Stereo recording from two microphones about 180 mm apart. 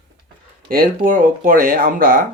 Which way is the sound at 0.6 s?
55° right (ahead or behind).